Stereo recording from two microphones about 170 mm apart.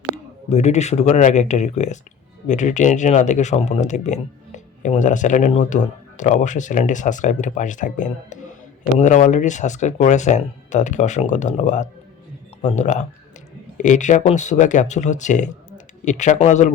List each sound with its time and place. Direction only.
0.5 s speech: 40° left (ahead or behind)